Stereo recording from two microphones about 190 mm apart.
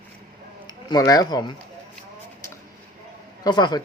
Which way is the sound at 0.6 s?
20° left (ahead or behind).